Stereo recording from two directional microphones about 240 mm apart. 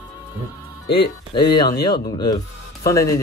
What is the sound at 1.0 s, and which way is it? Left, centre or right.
Speech, centre.